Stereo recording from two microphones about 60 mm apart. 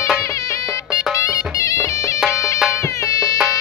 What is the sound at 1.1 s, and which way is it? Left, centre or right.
Music, left.